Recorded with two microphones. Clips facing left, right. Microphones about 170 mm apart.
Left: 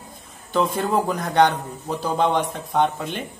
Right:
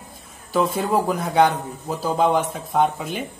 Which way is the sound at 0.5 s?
5° right (ahead or behind).